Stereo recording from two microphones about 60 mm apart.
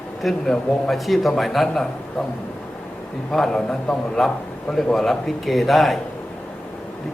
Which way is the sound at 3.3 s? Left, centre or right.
Centre.